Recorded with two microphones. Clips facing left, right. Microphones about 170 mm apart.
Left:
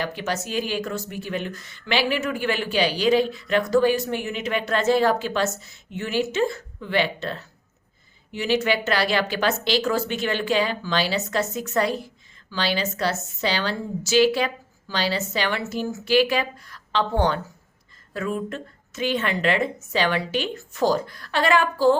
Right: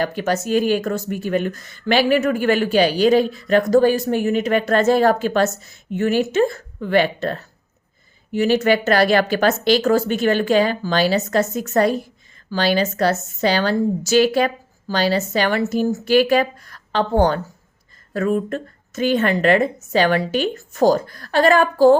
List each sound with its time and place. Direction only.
0.0 s speech: 45° right (ahead or behind)